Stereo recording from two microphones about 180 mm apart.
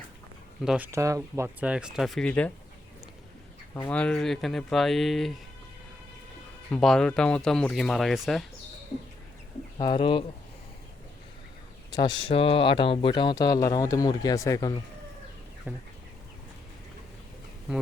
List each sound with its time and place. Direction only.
0.6 s speech: 5° right (ahead or behind)
0.9 s speech: 15° right (ahead or behind)
1.6 s speech: 5° right (ahead or behind)
3.8 s speech: 10° left (ahead or behind)
6.7 s speech: 5° left (ahead or behind)
9.7 s speech: 25° left (ahead or behind)
11.9 s speech: 25° left (ahead or behind)
15.7 s speech: 10° right (ahead or behind)